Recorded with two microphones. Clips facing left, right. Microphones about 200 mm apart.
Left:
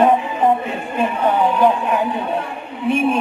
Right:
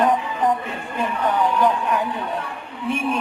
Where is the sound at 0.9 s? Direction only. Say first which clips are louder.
Left 4 dB; 25° left (ahead or behind).